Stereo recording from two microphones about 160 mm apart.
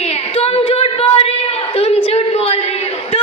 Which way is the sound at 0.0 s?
40° left (ahead or behind).